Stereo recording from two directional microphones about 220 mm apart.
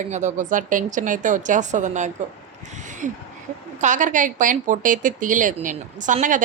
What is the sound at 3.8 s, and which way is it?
A woman's voice, 35° right (ahead or behind).